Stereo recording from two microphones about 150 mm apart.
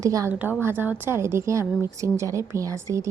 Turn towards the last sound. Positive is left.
turn(degrees=-20)  # may be behind; listen again after turning